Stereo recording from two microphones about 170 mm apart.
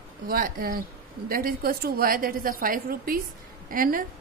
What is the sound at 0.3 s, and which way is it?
A woman's voice, 60° right (ahead or behind).